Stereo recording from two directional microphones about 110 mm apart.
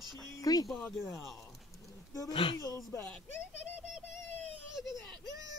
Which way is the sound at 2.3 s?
55° left (ahead or behind).